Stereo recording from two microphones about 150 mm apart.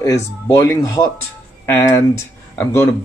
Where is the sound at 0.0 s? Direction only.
20° left (ahead or behind).